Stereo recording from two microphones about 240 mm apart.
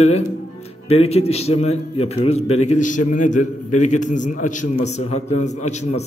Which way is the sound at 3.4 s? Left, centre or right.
Left.